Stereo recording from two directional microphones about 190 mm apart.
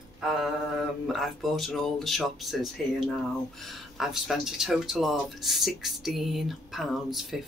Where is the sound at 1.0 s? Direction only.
Centre (ahead or behind).